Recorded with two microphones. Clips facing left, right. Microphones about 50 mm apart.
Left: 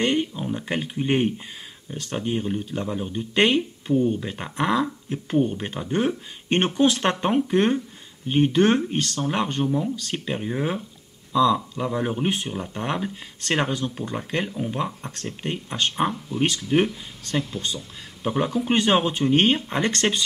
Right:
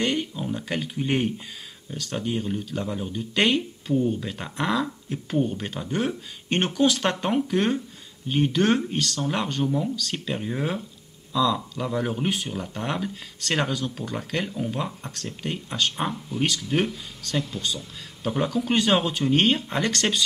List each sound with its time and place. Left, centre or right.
0.0 s speech: centre